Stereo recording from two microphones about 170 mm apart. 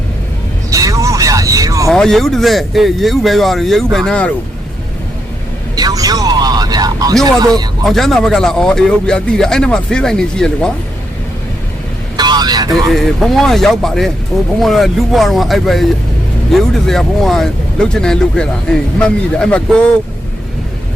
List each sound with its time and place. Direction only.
0.7 s vehicle: 20° right (ahead or behind)
1.9 s speech: centre (ahead or behind)
5.7 s vehicle: 20° right (ahead or behind)
7.3 s speech: 25° right (ahead or behind)
7.9 s speech: centre (ahead or behind)
12.1 s vehicle: 25° right (ahead or behind)
12.9 s speech: centre (ahead or behind)